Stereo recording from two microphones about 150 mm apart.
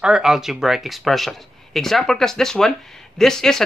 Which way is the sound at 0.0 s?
5° right (ahead or behind).